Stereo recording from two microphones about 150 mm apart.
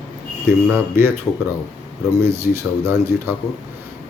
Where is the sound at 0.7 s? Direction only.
15° right (ahead or behind).